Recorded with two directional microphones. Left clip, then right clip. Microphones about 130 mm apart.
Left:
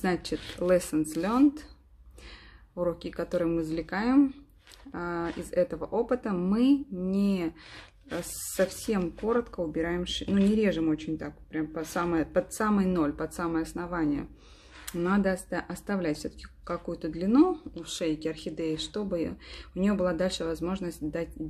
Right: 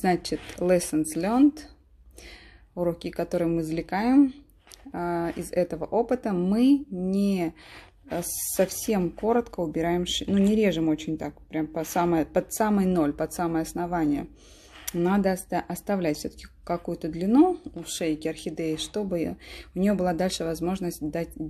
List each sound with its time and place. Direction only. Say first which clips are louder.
0.0 s speech: right 5 dB; 15° right (ahead or behind)
2.8 s speech: right 3 dB; 15° right (ahead or behind)